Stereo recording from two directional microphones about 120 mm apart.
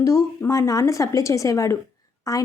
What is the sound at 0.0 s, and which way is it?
A woman's voice, 25° left (ahead or behind).